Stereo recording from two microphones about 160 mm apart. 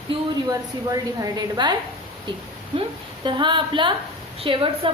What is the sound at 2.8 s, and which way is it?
A woman's voice, 30° right (ahead or behind).